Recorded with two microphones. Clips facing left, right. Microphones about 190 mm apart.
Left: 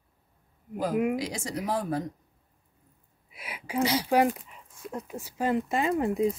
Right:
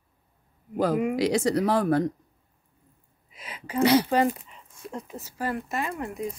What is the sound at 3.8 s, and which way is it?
Speech, 60° right (ahead or behind).